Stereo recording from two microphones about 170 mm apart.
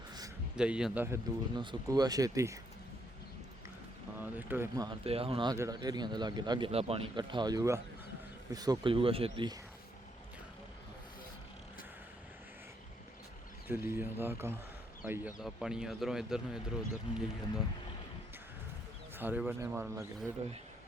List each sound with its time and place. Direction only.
0.5 s speech: 5° right (ahead or behind)
1.5 s speech: 25° right (ahead or behind)
4.2 s speech: 10° right (ahead or behind)
4.9 s speech: 35° right (ahead or behind)
6.7 s speech: 35° right (ahead or behind)
13.7 s speech: 10° right (ahead or behind)
19.1 s speech: 10° right (ahead or behind)